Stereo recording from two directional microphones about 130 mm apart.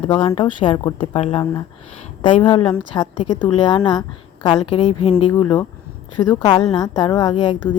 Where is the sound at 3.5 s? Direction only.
40° left (ahead or behind).